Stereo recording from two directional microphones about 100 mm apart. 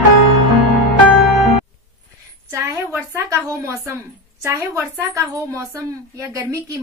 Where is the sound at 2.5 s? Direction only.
30° right (ahead or behind).